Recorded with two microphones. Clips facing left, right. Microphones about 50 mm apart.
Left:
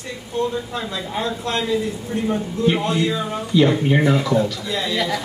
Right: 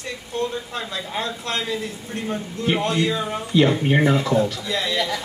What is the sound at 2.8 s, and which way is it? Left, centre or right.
Speech, centre.